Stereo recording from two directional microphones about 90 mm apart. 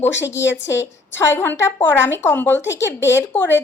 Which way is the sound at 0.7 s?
30° left (ahead or behind).